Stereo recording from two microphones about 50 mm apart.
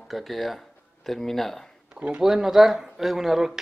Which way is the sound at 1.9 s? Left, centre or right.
Right.